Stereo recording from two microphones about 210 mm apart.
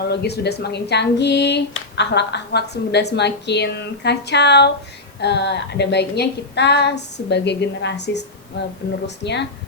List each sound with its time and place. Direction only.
0.1 s speech: 50° left (ahead or behind)